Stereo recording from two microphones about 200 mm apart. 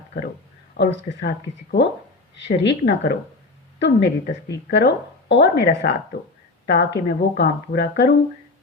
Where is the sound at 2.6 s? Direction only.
60° left (ahead or behind).